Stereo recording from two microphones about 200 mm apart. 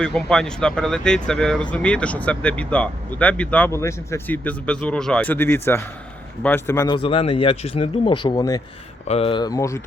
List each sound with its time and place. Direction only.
0.0 s speech: 5° left (ahead or behind)
6.7 s speech: 20° left (ahead or behind)
9.0 s speech: 30° left (ahead or behind)